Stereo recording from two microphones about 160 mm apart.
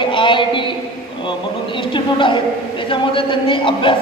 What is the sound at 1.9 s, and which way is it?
A man's voice, 30° left (ahead or behind).